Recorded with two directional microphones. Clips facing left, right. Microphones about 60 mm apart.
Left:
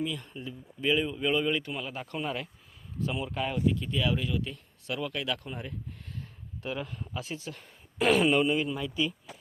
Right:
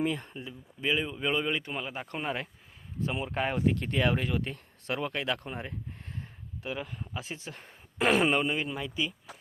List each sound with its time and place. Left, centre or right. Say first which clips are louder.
0.0 s speech: right 3 dB; right
0.3 s speech: left 2 dB; centre; by 3.8 s right
3.8 s speech: right 2 dB; right
6.6 s speech: left 1 dB; centre
7.3 s speech: left 2 dB; right